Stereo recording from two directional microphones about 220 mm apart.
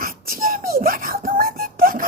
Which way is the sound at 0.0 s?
40° right (ahead or behind).